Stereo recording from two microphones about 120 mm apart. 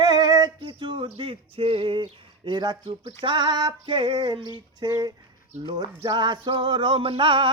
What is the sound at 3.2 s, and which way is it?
Singing, 40° right (ahead or behind).